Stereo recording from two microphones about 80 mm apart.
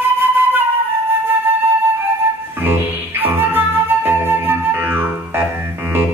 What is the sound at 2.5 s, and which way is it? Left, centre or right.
Music, right.